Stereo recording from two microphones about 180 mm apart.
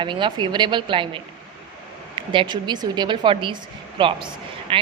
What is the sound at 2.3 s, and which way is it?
A woman's voice, 25° right (ahead or behind).